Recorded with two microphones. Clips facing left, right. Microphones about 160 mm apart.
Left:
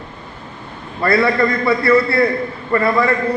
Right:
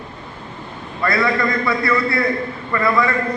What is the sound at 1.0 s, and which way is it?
A man's voice, 30° left (ahead or behind).